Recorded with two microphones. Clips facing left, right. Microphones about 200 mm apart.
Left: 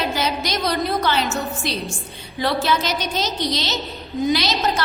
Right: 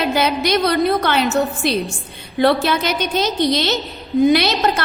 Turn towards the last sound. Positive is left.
turn(degrees=-60)  # may be behind; listen again after turning